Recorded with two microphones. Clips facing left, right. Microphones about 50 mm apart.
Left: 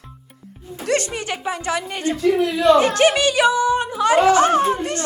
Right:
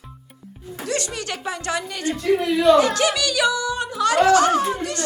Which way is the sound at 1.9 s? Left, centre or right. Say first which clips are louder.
Left 3 dB; left.